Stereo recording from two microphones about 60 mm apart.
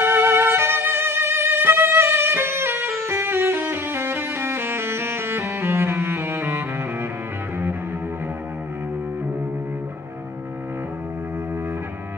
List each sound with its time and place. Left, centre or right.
0.0 s violin: right